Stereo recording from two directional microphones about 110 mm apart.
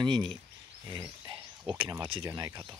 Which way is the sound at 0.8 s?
35° right (ahead or behind).